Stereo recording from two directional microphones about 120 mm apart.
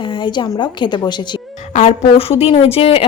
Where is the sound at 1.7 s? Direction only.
70° left (ahead or behind); by 3.1 s 50° left (ahead or behind).